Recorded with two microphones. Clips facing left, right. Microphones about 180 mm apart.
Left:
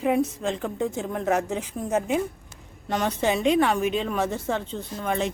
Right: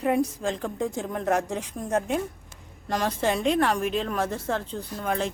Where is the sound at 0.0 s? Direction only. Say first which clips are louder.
Left 1 dB; centre (ahead or behind).